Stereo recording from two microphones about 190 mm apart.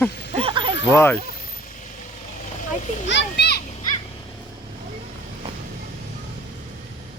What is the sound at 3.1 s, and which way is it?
Speech, 65° left (ahead or behind).